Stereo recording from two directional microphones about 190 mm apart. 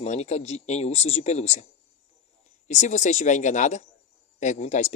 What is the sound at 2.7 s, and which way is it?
Speech, 40° left (ahead or behind).